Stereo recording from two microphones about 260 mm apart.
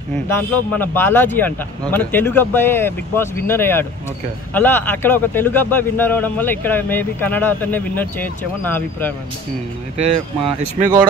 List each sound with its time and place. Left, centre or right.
0.3 s speech: centre
9.9 s speech: right